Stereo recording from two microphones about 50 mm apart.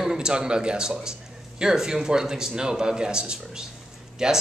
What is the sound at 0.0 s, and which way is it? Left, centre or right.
Speech, centre.